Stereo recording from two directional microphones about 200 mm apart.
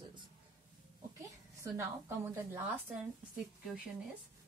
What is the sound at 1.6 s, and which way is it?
Speech, 15° right (ahead or behind).